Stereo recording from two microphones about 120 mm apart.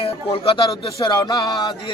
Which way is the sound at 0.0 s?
50° left (ahead or behind).